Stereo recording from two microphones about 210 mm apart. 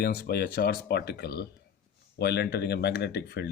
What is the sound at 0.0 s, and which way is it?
Speech, 45° left (ahead or behind).